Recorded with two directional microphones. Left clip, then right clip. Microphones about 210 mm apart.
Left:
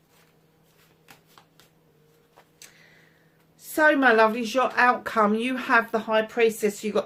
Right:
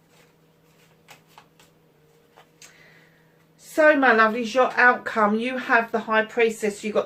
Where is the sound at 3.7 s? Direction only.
45° left (ahead or behind).